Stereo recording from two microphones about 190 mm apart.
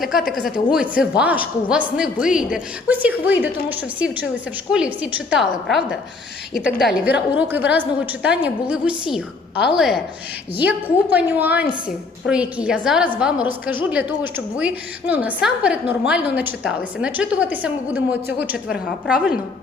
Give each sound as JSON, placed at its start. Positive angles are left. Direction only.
{"t": 0.0, "sound": "a woman's voice", "side_deg": 0}